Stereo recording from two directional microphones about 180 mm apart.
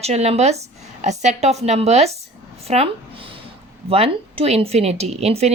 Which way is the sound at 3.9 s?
35° right (ahead or behind).